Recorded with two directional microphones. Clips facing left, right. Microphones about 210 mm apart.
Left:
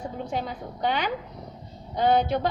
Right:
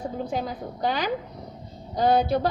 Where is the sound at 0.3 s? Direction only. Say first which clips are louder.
Right 2 dB; 40° right (ahead or behind).